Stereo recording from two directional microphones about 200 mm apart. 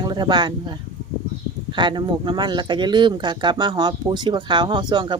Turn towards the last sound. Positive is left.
turn(degrees=-20)  # may be behind; listen again after turning